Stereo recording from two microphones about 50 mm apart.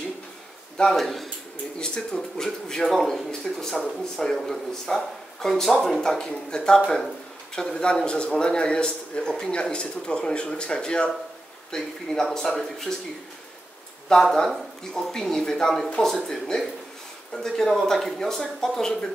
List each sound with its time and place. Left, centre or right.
0.9 s speech: centre
1.8 s speech: centre
5.9 s a man's voice: centre
14.3 s speech: centre